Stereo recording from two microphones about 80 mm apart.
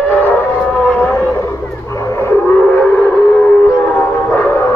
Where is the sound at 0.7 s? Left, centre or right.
Centre.